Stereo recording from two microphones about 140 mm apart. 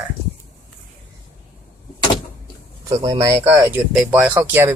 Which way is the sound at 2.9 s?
25° right (ahead or behind).